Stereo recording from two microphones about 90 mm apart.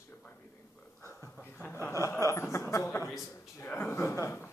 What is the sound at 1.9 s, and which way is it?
Speech, 35° left (ahead or behind).